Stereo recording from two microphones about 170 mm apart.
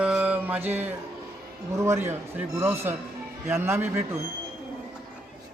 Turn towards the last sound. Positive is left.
turn(degrees=-15)  # may be behind; listen again after turning